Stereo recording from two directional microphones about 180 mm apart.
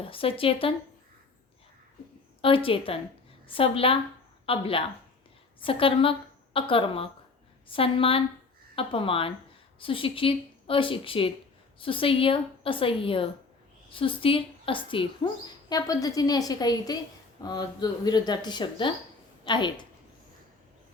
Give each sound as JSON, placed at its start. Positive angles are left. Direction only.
{"t": 0.0, "sound": "speech", "side_deg": 30}
{"t": 2.4, "sound": "a woman's voice", "side_deg": 30}